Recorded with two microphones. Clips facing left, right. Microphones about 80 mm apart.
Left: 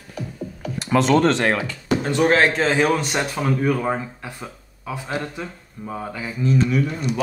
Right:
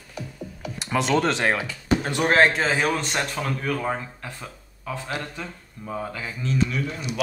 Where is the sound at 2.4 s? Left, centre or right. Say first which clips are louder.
Left 3 dB; centre.